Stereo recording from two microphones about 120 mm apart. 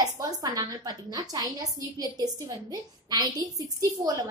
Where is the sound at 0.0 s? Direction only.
30° right (ahead or behind).